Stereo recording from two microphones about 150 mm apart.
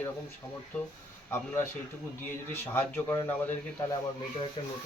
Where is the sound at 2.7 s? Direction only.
15° left (ahead or behind).